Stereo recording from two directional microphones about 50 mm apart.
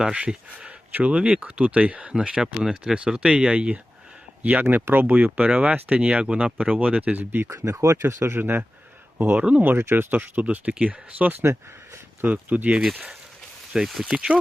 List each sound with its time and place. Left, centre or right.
0.0 s speech: centre
4.9 s speech: right
7.2 s speech: right
7.4 s speech: right
9.4 s speech: right
9.6 s speech: right
13.7 s speech: centre
14.0 s speech: centre